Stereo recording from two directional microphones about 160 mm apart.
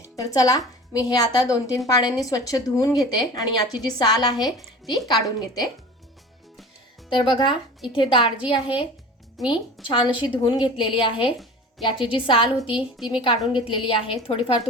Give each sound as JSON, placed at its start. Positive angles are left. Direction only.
{"t": 0.3, "sound": "a woman's voice", "side_deg": 20}
{"t": 7.1, "sound": "a woman's voice", "side_deg": 30}
{"t": 9.4, "sound": "a woman's voice", "side_deg": 0}
{"t": 9.8, "sound": "a woman's voice", "side_deg": 30}